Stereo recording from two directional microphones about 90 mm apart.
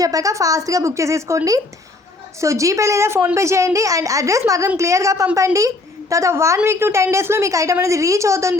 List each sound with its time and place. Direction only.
0.0 s a woman's voice: 40° right (ahead or behind)
2.4 s a woman's voice: 35° right (ahead or behind)